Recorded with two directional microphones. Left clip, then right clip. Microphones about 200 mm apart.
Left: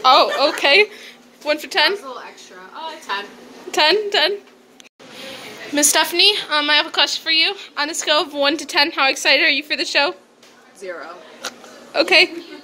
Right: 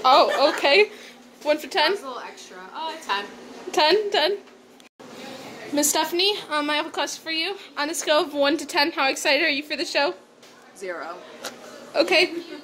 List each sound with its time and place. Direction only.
0.0 s a woman's voice: 5° right (ahead or behind)
3.7 s a woman's voice: 5° right (ahead or behind)
5.8 s a woman's voice: 5° right (ahead or behind)
10.8 s speech: 30° right (ahead or behind)
11.4 s a sound: centre (ahead or behind)